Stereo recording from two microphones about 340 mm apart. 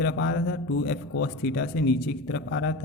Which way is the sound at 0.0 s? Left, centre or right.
Left.